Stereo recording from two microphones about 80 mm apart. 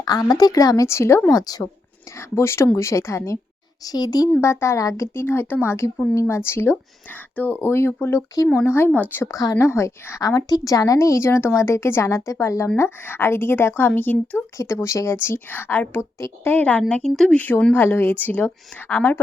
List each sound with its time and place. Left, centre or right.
0.0 s speech: left
0.9 s a woman's voice: left
1.3 s a child's voice: left
2.1 s a woman's voice: left
3.8 s a child's voice: left
4.4 s a woman's voice: left
5.1 s a woman's voice: left
9.2 s speech: left
9.6 s a woman's voice: left
14.6 s a woman's voice: left
16.1 s a woman's voice: left
16.5 s speech: centre
16.9 s speech: centre
17.3 s speech: left